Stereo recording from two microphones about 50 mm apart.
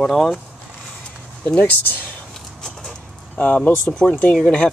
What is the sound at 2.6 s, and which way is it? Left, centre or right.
Dog, centre.